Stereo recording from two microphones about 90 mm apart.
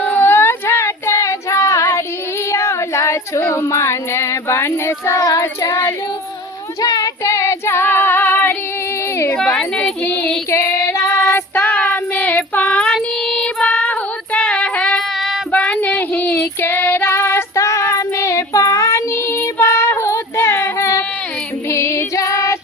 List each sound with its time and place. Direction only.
0.0 s female singing: 25° left (ahead or behind)
5.2 s child singing: 35° left (ahead or behind)
6.8 s female singing: 40° left (ahead or behind); by 8.5 s 20° left (ahead or behind)
9.3 s speech: 15° left (ahead or behind)
10.8 s music: 35° left (ahead or behind)
11.8 s child singing: 15° left (ahead or behind)
14.3 s female singing: 10° left (ahead or behind)
15.5 s music: 15° left (ahead or behind)
16.0 s child singing: 20° left (ahead or behind)
21.7 s music: 30° left (ahead or behind)